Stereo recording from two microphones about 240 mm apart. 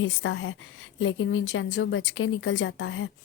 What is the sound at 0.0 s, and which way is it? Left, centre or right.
A woman's voice, left.